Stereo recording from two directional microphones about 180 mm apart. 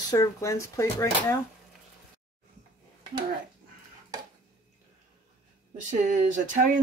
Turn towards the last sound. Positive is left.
turn(degrees=-45)  # may be behind; listen again after turning